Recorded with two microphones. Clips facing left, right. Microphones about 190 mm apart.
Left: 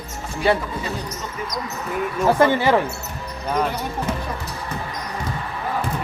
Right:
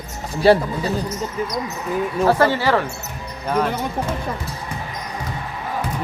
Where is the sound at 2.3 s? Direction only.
20° left (ahead or behind).